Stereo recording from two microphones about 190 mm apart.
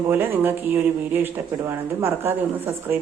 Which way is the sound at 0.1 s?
10° right (ahead or behind).